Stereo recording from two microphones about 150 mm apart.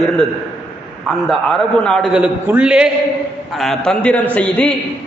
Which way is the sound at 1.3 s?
5° left (ahead or behind).